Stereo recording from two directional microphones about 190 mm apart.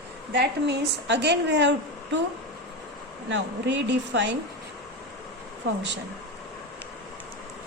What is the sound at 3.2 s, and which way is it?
Speech, 70° right (ahead or behind).